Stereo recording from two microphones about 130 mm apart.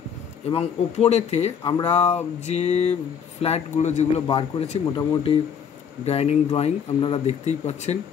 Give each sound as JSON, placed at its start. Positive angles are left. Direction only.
{"t": 0.5, "sound": "speech", "side_deg": 55}
{"t": 1.6, "sound": "speech", "side_deg": 35}
{"t": 1.9, "sound": "speech", "side_deg": 55}
{"t": 4.3, "sound": "speech", "side_deg": 45}
{"t": 6.0, "sound": "speech", "side_deg": 55}